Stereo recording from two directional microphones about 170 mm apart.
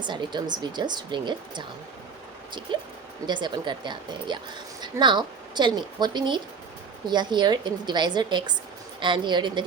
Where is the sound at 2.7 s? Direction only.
30° right (ahead or behind).